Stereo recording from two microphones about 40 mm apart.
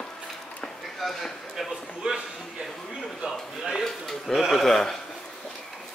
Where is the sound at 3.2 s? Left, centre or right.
Right.